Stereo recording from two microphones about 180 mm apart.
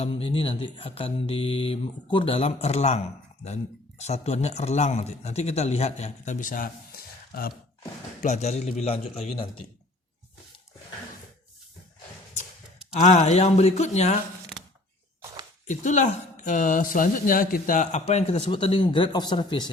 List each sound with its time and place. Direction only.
0.0 s speech: 30° left (ahead or behind); by 7.5 s 55° left (ahead or behind)
8.2 s speech: 40° left (ahead or behind)
13.0 s speech: 40° left (ahead or behind)
15.6 s speech: 45° left (ahead or behind); by 19.7 s 25° left (ahead or behind)